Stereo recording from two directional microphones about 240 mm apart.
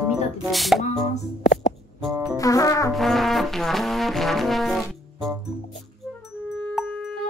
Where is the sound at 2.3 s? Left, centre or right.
Centre.